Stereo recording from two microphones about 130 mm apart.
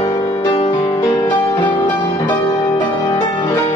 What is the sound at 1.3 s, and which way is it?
Music, 35° left (ahead or behind).